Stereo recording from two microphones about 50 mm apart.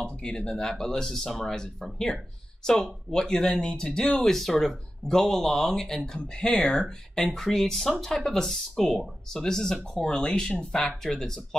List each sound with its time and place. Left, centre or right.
0.0 s speech: centre
7.2 s speech: centre